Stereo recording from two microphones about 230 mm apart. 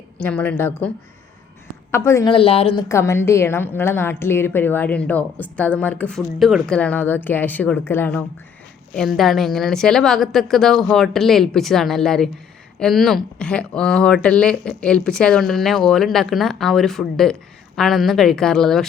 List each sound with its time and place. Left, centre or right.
0.2 s a woman's voice: centre; by 2.8 s left
2.9 s a woman's voice: centre